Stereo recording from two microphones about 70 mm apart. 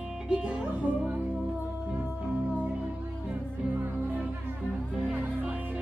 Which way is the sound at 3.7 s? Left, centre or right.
Right.